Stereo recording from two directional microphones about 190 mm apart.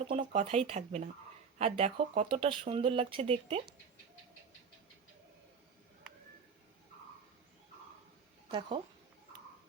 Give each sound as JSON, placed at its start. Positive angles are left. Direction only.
{"t": 0.2, "sound": "speech", "side_deg": -35}
{"t": 8.4, "sound": "speech", "side_deg": -25}